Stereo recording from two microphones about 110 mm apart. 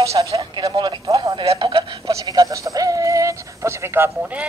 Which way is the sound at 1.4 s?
55° right (ahead or behind).